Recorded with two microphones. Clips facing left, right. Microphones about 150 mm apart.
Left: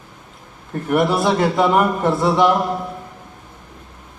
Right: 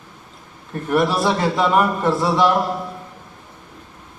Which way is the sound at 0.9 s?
20° left (ahead or behind).